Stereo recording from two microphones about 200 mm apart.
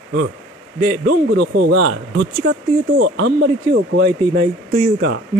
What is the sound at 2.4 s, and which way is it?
Speech, 50° right (ahead or behind).